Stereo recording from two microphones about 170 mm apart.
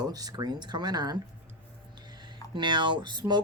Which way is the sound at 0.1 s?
20° right (ahead or behind).